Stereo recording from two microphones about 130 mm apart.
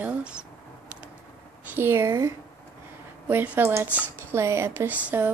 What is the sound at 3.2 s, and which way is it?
Speech, 15° right (ahead or behind).